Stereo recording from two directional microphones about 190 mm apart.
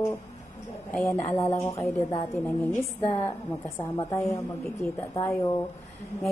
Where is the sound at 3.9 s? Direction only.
15° left (ahead or behind).